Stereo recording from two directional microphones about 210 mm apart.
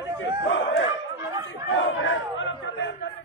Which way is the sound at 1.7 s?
65° left (ahead or behind).